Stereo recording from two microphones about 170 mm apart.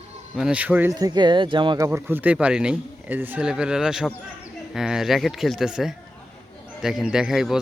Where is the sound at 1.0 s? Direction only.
25° right (ahead or behind).